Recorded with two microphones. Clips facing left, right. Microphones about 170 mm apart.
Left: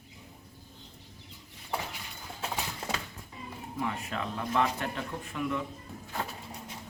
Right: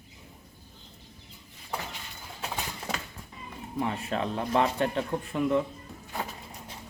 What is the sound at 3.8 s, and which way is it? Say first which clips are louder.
Speech: right 4 dB; 30° right (ahead or behind).